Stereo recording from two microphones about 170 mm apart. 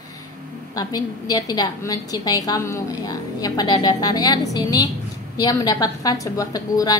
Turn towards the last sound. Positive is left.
turn(degrees=20)  # may be behind; listen again after turning